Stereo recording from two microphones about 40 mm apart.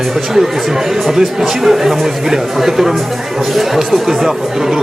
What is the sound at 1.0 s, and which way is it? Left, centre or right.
Speech, centre.